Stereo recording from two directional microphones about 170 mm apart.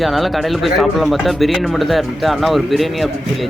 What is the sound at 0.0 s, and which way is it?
Speech, centre (ahead or behind).